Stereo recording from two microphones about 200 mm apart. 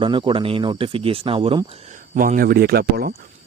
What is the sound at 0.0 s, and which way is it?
Speech, 25° right (ahead or behind).